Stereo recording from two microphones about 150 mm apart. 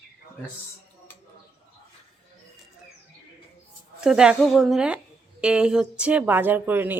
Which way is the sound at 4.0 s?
5° right (ahead or behind).